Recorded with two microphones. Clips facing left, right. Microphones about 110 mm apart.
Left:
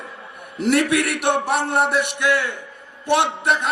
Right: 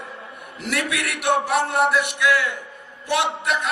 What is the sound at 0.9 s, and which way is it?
A man's voice, 30° left (ahead or behind).